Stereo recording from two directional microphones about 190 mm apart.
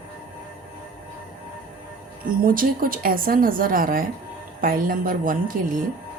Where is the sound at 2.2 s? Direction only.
50° right (ahead or behind).